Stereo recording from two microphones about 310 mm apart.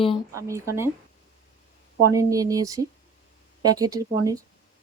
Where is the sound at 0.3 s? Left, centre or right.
Centre.